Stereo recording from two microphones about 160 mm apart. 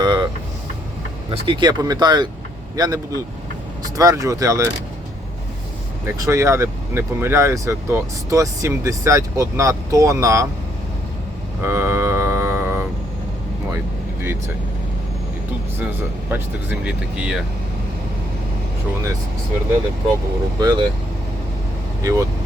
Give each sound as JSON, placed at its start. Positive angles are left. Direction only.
{"t": 0.0, "sound": "vehicle", "side_deg": -25}
{"t": 1.3, "sound": "speech", "side_deg": -30}
{"t": 6.1, "sound": "speech", "side_deg": -20}
{"t": 11.6, "sound": "mantra", "side_deg": -15}
{"t": 14.2, "sound": "speech", "side_deg": -15}
{"t": 16.3, "sound": "speech", "side_deg": -10}
{"t": 20.6, "sound": "speech", "side_deg": -25}
{"t": 22.0, "sound": "speech", "side_deg": -20}